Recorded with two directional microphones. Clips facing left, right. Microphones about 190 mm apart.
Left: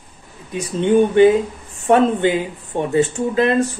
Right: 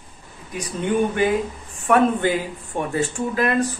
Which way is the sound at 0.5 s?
25° left (ahead or behind).